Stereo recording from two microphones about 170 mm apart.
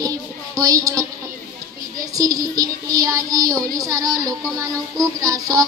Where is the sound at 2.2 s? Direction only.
20° right (ahead or behind).